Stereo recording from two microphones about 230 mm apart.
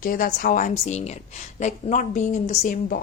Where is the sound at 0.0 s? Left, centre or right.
Left.